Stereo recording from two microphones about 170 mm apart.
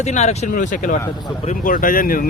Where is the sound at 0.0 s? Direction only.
40° left (ahead or behind).